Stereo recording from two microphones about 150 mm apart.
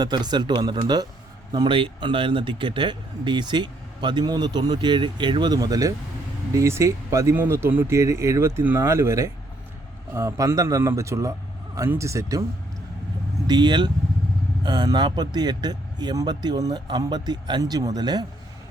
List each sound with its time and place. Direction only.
0.0 s speech: 30° right (ahead or behind)
13.5 s speech: 30° right (ahead or behind)